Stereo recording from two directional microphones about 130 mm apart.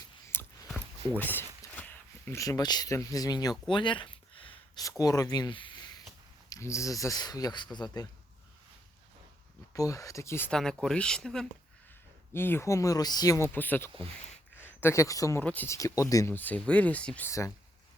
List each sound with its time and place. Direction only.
0.3 s a sound: 15° left (ahead or behind)
1.1 s speech: 15° left (ahead or behind); by 3.5 s 30° left (ahead or behind)
3.7 s a sound: 40° left (ahead or behind)
4.8 s speech: 25° left (ahead or behind)
6.5 s speech: 25° left (ahead or behind)
9.7 s speech: 25° left (ahead or behind)
10.5 s speech: 5° left (ahead or behind)
12.3 s speech: 15° left (ahead or behind)
15.4 s speech: 15° left (ahead or behind)
16.3 s speech: 15° left (ahead or behind)
17.2 s speech: 25° left (ahead or behind)